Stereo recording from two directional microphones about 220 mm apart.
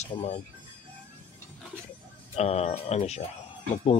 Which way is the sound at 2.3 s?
30° left (ahead or behind).